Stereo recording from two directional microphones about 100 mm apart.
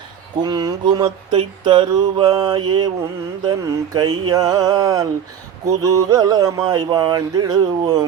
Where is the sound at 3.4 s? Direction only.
40° right (ahead or behind).